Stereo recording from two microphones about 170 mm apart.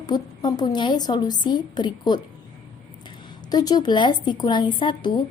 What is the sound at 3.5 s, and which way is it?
A woman's voice, 25° left (ahead or behind).